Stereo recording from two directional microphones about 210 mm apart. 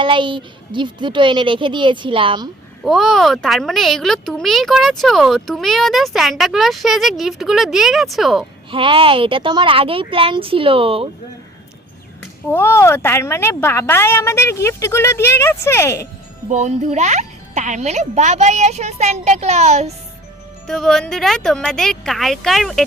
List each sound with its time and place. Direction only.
0.0 s a child's voice: 25° right (ahead or behind)
2.8 s speech: centre (ahead or behind)
8.7 s a child's voice: 25° right (ahead or behind)
12.5 s speech: 10° left (ahead or behind)
16.5 s a child's voice: 35° right (ahead or behind)
20.7 s speech: centre (ahead or behind)